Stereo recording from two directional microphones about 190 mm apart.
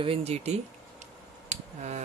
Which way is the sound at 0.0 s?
30° right (ahead or behind).